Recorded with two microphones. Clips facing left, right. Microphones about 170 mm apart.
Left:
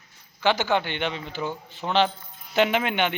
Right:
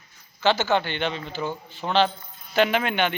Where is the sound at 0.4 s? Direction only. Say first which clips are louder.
Right 1 dB; 15° left (ahead or behind).